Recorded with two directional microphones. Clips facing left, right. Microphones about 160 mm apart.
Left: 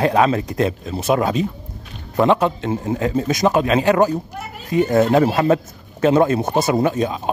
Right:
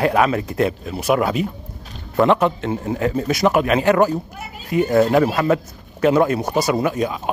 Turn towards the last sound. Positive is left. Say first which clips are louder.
# left 2 dB
turn(degrees=25)  # may be behind; listen again after turning